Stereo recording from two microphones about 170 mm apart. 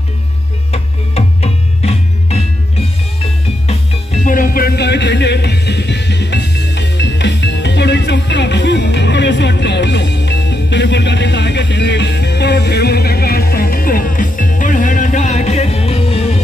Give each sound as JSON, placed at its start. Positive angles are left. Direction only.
{"t": 0.7, "sound": "music", "side_deg": 40}
{"t": 4.3, "sound": "music", "side_deg": 55}